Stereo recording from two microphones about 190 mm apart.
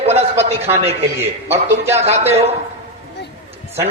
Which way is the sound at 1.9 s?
35° right (ahead or behind).